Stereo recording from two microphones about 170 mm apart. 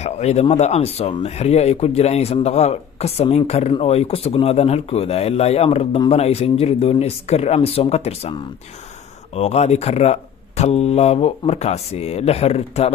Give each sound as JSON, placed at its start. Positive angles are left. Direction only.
{"t": 0.0, "sound": "speech", "side_deg": 40}